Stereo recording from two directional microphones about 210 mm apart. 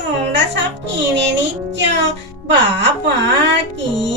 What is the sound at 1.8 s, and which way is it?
Music, 55° right (ahead or behind).